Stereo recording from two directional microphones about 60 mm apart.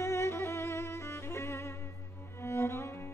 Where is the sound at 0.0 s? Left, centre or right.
Left.